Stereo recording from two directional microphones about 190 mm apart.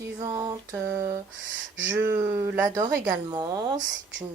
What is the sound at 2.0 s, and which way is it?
Speech, 15° right (ahead or behind).